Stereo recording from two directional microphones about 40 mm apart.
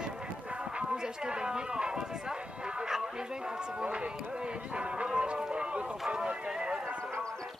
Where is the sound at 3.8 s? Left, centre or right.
Right.